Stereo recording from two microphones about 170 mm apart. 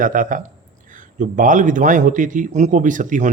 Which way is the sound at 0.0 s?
50° right (ahead or behind).